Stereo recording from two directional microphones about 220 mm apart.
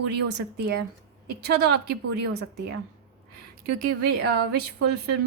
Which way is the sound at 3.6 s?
45° right (ahead or behind).